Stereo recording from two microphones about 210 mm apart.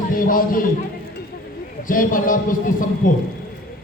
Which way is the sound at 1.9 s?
40° left (ahead or behind).